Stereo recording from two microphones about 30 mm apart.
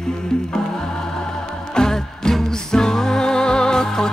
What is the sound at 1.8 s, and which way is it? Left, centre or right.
Music, left.